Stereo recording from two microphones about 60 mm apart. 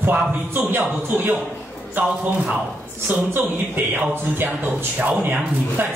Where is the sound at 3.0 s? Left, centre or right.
Right.